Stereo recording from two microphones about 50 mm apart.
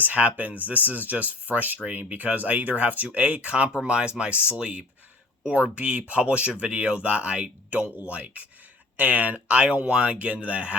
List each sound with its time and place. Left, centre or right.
0.0 s speech: right